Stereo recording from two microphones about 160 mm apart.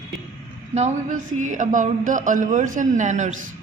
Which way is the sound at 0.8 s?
50° right (ahead or behind).